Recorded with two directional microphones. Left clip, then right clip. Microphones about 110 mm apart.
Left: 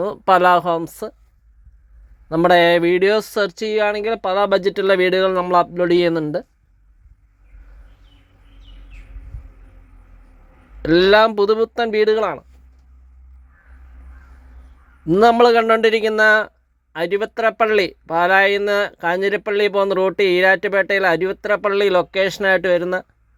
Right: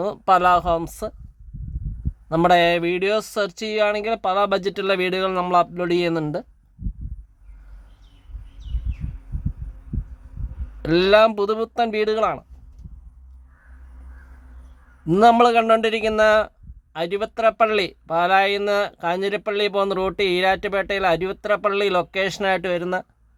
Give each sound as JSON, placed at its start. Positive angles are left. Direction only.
{"t": 0.3, "sound": "speech", "side_deg": 25}
{"t": 0.9, "sound": "speech", "side_deg": 10}
{"t": 2.3, "sound": "speech", "side_deg": 5}
{"t": 2.6, "sound": "speech", "side_deg": 25}
{"t": 10.8, "sound": "speech", "side_deg": 10}
{"t": 15.2, "sound": "speech", "side_deg": 10}